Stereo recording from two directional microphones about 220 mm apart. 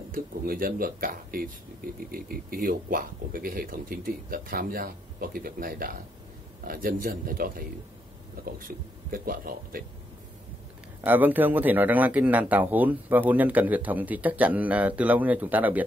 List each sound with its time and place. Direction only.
0.1 s speech: 40° right (ahead or behind)
11.1 s speech: 10° right (ahead or behind)